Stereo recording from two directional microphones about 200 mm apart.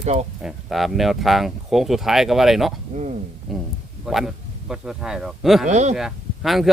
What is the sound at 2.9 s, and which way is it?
Speech, 35° right (ahead or behind).